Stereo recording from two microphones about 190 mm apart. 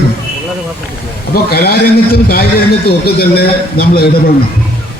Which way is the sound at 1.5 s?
55° left (ahead or behind).